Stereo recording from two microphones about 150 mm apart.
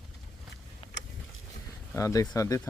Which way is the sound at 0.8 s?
40° left (ahead or behind).